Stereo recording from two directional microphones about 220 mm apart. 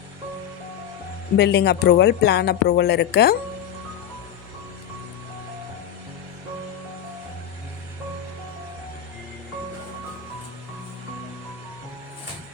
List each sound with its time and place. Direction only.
1.4 s speech: 50° left (ahead or behind)